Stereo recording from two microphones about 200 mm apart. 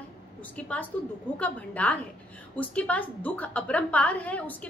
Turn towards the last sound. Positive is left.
turn(degrees=5)  # may be behind; listen again after turning